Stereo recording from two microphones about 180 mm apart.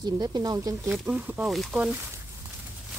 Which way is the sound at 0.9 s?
10° right (ahead or behind).